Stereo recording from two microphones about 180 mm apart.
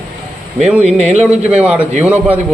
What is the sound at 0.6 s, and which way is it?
Speech, 5° right (ahead or behind).